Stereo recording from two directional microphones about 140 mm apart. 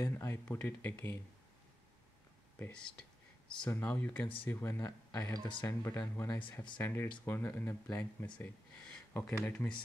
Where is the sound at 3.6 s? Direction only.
15° left (ahead or behind).